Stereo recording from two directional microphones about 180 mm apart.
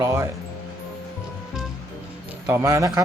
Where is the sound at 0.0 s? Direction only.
15° right (ahead or behind).